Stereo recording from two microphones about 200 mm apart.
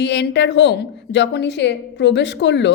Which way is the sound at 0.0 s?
60° left (ahead or behind).